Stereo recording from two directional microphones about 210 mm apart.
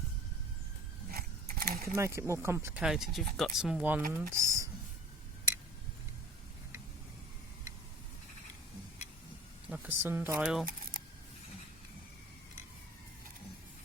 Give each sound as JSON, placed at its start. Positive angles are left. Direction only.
{"t": 1.1, "sound": "mechanisms", "side_deg": -45}
{"t": 2.0, "sound": "speech", "side_deg": -15}
{"t": 9.6, "sound": "speech", "side_deg": -5}
{"t": 10.4, "sound": "speech", "side_deg": 0}